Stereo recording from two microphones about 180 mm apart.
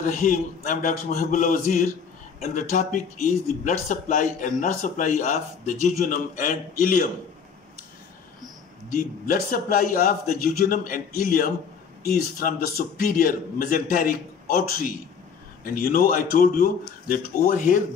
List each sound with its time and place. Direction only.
0.0 s speech: 45° left (ahead or behind)
8.9 s speech: 55° left (ahead or behind)